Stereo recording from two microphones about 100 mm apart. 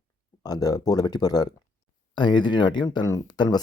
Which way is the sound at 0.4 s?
40° left (ahead or behind).